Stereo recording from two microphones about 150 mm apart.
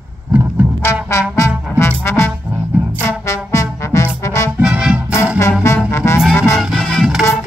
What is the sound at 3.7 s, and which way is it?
Music, 20° left (ahead or behind).